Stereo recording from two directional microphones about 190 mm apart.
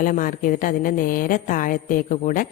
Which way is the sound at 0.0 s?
45° left (ahead or behind).